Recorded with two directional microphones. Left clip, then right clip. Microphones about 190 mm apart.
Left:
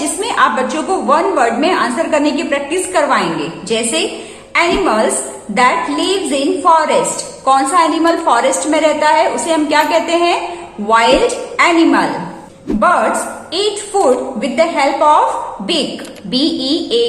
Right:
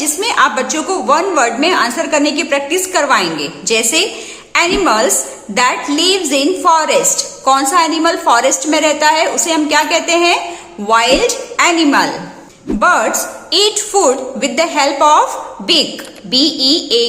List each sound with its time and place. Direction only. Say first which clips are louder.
0.2 s a woman's voice: right 1 dB; 30° right (ahead or behind)
13.5 s a woman's voice: right 4 dB; 40° right (ahead or behind)
16.3 s a woman's voice: right 4 dB; 30° right (ahead or behind)